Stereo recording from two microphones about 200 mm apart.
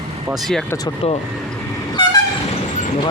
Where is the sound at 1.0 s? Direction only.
30° left (ahead or behind).